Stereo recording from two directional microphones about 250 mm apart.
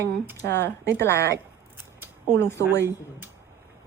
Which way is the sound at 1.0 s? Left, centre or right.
Centre.